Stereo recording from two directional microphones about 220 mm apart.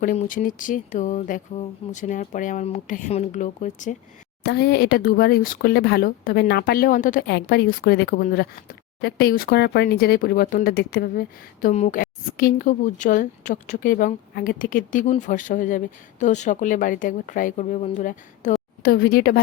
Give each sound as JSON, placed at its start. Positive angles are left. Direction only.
{"t": 0.0, "sound": "speech", "side_deg": 35}
{"t": 4.4, "sound": "speech", "side_deg": 50}